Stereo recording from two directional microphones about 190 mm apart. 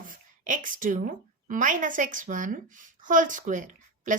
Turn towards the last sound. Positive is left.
turn(degrees=-40)  # may be behind; listen again after turning